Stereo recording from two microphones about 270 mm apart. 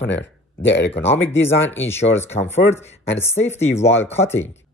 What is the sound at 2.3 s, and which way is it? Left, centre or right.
Speech, left.